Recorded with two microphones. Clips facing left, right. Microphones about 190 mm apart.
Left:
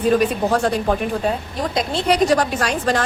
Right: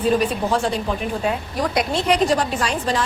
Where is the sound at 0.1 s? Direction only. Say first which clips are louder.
Left 3 dB; 45° left (ahead or behind).